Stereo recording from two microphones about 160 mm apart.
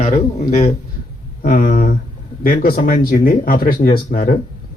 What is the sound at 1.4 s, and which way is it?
Speech, 55° left (ahead or behind).